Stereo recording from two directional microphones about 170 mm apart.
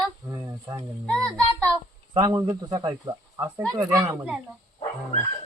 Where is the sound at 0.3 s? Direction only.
20° right (ahead or behind).